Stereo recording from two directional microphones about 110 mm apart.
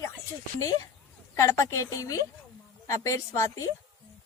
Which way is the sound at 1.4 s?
25° left (ahead or behind).